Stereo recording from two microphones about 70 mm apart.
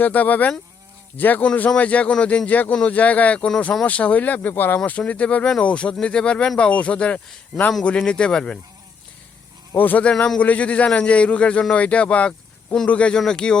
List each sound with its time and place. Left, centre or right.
0.0 s a man's voice: left
9.7 s a man's voice: left